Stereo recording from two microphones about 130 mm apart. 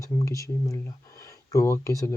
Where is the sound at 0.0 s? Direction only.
25° left (ahead or behind).